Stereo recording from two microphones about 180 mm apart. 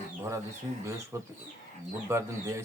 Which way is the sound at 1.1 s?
15° right (ahead or behind).